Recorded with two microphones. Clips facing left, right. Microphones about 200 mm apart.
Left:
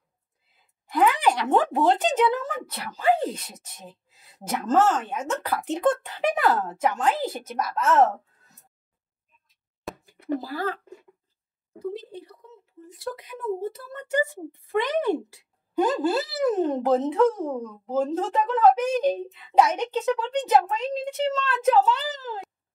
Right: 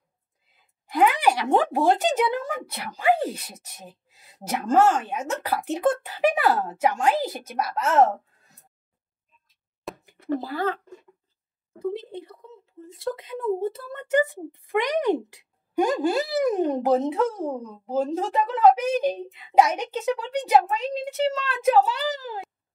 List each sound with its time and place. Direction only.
0.9 s speech: 10° right (ahead or behind)
9.9 s a sound: centre (ahead or behind)
10.4 s speech: 25° right (ahead or behind)
11.8 s speech: 25° right (ahead or behind)